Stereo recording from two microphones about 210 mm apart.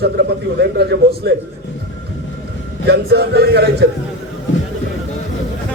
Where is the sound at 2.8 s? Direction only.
50° right (ahead or behind).